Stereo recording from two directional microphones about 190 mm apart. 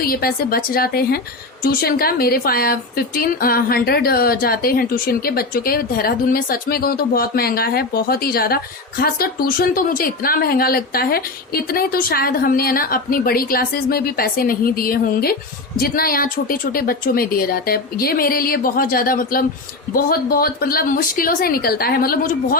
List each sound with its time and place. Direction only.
0.0 s speech: 50° left (ahead or behind)